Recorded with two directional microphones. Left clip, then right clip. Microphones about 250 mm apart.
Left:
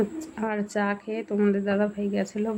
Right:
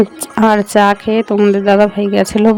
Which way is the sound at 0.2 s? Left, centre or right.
Right.